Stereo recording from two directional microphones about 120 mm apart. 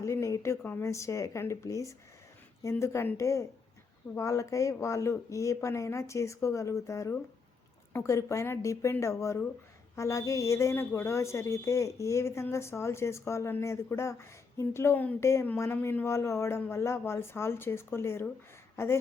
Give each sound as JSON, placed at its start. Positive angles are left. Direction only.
{"t": 0.0, "sound": "a woman's voice", "side_deg": 25}